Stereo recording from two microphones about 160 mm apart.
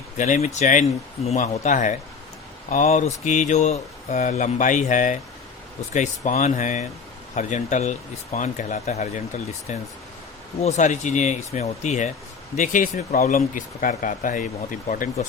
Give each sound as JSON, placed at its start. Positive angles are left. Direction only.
{"t": 0.2, "sound": "speech", "side_deg": 50}
{"t": 10.6, "sound": "speech", "side_deg": 45}